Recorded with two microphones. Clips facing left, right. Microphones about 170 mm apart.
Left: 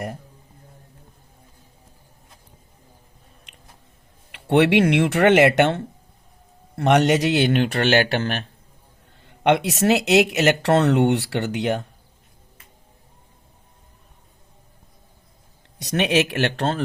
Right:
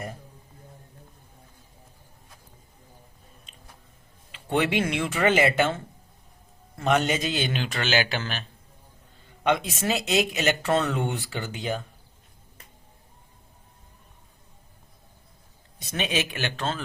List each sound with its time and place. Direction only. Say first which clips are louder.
3.5 s a sound: left 1 dB; 75° left (ahead or behind)
4.3 s a man's voice: left 8 dB; 70° left (ahead or behind)
9.4 s speech: left 6 dB; 70° left (ahead or behind)
15.8 s speech: left 8 dB; 70° left (ahead or behind)